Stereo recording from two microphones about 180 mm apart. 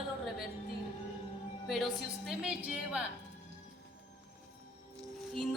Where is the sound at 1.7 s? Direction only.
Centre (ahead or behind).